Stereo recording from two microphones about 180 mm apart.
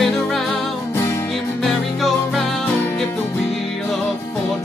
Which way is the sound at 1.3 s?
Centre (ahead or behind).